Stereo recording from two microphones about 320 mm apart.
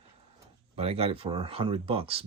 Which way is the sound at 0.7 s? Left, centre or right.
Centre.